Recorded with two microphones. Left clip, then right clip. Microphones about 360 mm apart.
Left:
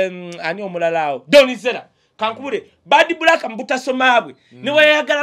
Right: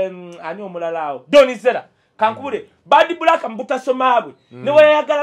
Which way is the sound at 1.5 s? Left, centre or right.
Centre.